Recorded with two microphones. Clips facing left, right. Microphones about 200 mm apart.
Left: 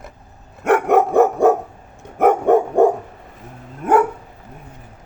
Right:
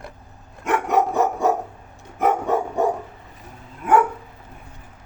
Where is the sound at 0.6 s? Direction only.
55° left (ahead or behind).